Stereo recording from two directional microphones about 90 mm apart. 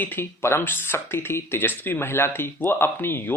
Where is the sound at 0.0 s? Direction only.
25° left (ahead or behind).